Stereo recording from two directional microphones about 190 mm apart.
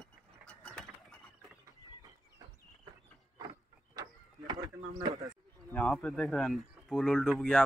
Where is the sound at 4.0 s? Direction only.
20° right (ahead or behind).